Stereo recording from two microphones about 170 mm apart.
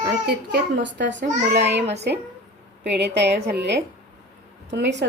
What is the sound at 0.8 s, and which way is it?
Speech, 90° right.